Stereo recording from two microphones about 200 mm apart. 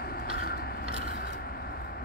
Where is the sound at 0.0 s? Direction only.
50° left (ahead or behind).